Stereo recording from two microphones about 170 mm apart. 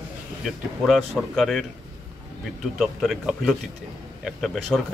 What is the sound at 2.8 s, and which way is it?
Speech, centre (ahead or behind).